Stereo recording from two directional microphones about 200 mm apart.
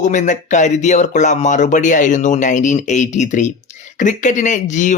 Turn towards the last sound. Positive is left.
turn(degrees=40)  # may be behind; listen again after turning